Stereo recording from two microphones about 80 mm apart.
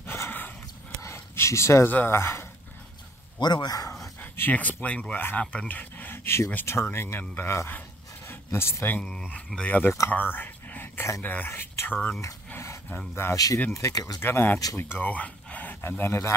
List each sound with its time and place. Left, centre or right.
0.0 s a sound: left
1.0 s a sound: left
1.9 s speech: left
3.3 s a man's voice: left
4.2 s speech: left
9.0 s speech: centre
9.6 s speech: left
10.1 s a sound: left
11.2 s speech: left
12.5 s a sound: left
13.7 s speech: left
14.2 s speech: left